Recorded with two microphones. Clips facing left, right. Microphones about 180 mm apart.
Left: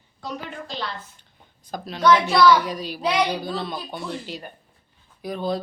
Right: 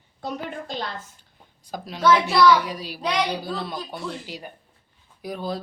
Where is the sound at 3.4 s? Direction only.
5° right (ahead or behind).